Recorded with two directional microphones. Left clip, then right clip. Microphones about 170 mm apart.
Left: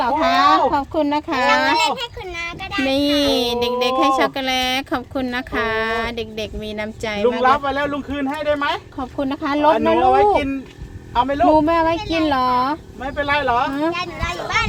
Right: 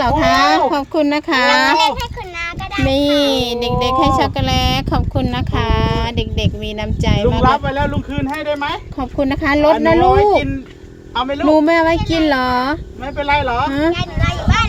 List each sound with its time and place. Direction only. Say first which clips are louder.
0.0 s speech: right 3 dB; 30° right (ahead or behind)
2.8 s speech: right 4 dB; centre (ahead or behind)
8.1 s speech: even; 35° right (ahead or behind)
13.9 s a child's voice: right 3 dB; 20° left (ahead or behind)